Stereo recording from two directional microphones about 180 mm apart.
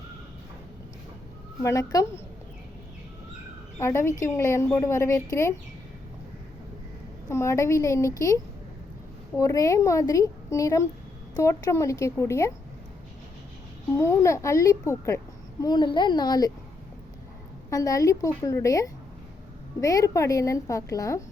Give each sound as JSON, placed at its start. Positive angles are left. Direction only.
{"t": 1.6, "sound": "a woman's voice", "side_deg": 15}
{"t": 3.8, "sound": "a woman's voice", "side_deg": 15}
{"t": 7.3, "sound": "a woman's voice", "side_deg": 15}
{"t": 13.9, "sound": "a woman's voice", "side_deg": 15}
{"t": 17.7, "sound": "a woman's voice", "side_deg": 20}